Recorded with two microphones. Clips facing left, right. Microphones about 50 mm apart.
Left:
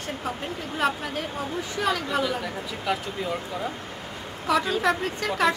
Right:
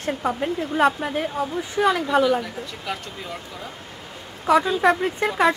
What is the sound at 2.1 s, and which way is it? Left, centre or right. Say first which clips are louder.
Speech: right 7 dB; centre.